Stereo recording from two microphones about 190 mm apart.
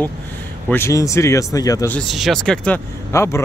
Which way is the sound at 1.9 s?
Centre (ahead or behind).